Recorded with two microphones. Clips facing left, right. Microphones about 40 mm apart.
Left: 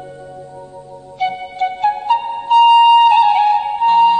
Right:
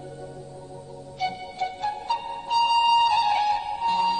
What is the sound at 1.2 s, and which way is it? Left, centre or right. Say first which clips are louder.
Music: left 10 dB; left.